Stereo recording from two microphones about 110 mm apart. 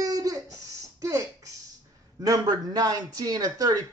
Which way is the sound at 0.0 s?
30° right (ahead or behind).